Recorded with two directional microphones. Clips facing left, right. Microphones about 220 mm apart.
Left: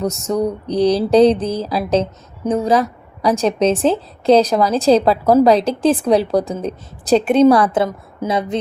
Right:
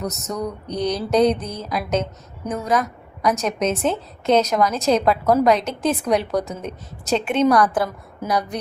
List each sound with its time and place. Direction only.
0.0 s a woman's voice: 30° left (ahead or behind)
7.4 s a woman's voice: 25° left (ahead or behind)